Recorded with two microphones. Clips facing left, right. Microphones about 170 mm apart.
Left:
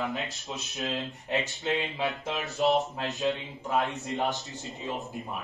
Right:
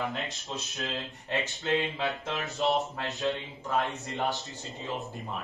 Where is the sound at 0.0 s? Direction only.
Centre (ahead or behind).